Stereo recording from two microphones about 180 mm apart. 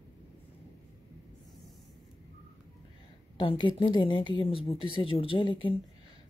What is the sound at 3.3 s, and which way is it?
Speech, 25° left (ahead or behind).